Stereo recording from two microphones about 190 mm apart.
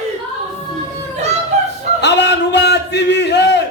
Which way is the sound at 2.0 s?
65° left (ahead or behind).